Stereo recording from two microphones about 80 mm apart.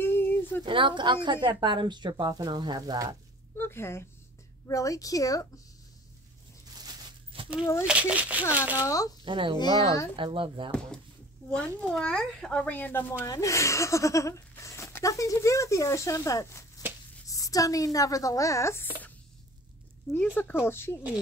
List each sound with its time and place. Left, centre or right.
0.0 s a sound: left
0.7 s a woman's voice: right
3.5 s speech: left
4.6 s speech: left
6.8 s a sound: right
7.8 s speech: centre
8.7 s speech: left
9.2 s a child's voice: right
11.5 s speech: centre
13.3 s speech: left
20.2 s speech: left